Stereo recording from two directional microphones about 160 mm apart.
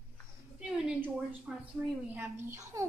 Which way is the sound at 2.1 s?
15° right (ahead or behind).